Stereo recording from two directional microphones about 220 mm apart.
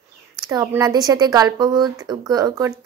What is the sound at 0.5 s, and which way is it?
Speech, 15° right (ahead or behind).